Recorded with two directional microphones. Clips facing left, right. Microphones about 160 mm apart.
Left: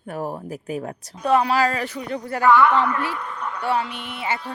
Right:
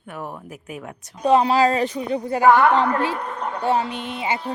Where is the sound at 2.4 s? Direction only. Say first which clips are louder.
Right 1 dB; 40° right (ahead or behind); by 4.5 s 20° right (ahead or behind).